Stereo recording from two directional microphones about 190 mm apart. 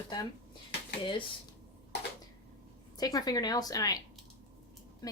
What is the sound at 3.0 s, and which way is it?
A woman's voice, 20° left (ahead or behind).